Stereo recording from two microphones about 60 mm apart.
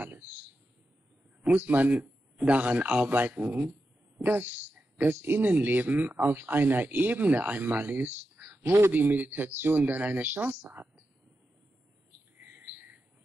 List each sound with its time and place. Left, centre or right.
1.4 s speech: right
12.4 s bird: right